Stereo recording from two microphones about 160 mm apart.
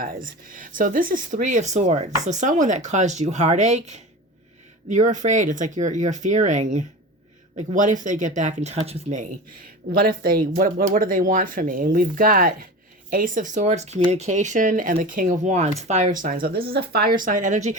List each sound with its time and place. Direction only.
0.0 s speech: 60° right (ahead or behind); by 9.2 s 40° right (ahead or behind)
9.9 s speech: 65° right (ahead or behind); by 17.7 s 50° right (ahead or behind)